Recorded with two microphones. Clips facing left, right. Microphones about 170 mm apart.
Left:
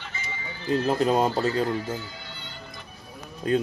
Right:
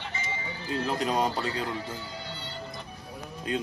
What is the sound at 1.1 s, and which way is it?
Speech, 35° left (ahead or behind).